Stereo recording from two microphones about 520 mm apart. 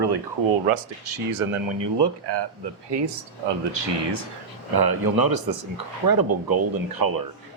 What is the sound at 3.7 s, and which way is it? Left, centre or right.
Speech, right.